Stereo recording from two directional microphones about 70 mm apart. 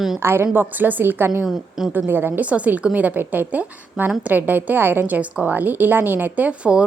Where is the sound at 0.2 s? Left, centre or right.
Right.